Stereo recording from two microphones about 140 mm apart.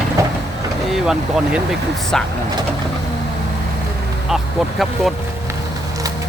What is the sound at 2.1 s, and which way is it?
Speech, 5° left (ahead or behind).